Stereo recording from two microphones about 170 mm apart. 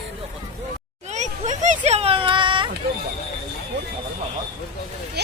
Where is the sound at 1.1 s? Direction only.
45° right (ahead or behind).